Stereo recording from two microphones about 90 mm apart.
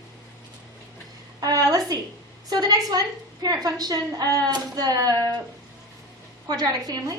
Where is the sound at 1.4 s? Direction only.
45° right (ahead or behind).